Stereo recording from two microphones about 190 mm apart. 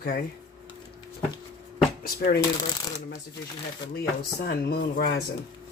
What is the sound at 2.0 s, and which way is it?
Speech, 50° left (ahead or behind).